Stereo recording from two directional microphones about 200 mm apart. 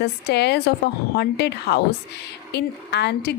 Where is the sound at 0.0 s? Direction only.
55° left (ahead or behind).